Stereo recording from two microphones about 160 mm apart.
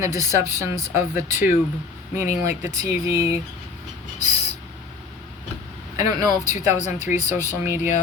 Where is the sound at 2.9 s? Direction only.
20° right (ahead or behind).